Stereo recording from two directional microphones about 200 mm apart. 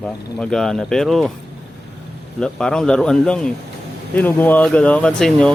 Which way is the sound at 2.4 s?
5° left (ahead or behind).